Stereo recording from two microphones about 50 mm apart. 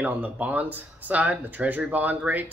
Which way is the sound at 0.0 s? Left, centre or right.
Right.